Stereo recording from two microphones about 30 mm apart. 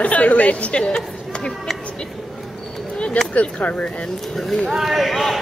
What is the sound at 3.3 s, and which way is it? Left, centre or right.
Speech, left.